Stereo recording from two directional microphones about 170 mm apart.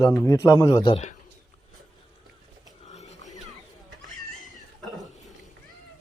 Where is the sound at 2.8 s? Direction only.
40° left (ahead or behind).